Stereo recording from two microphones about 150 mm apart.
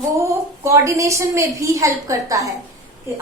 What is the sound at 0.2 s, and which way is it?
Speech, 20° right (ahead or behind).